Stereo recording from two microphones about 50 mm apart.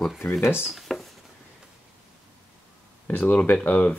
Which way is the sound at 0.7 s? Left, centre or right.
Centre.